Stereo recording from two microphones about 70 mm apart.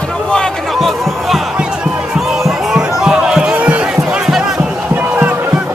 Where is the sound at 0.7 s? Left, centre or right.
Centre.